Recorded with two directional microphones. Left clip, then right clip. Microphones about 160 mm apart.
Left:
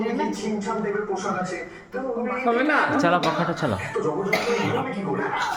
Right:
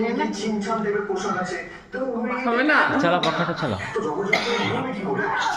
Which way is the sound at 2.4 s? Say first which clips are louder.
Right 1 dB; 20° right (ahead or behind).